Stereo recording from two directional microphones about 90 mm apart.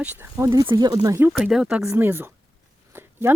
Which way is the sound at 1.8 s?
30° right (ahead or behind).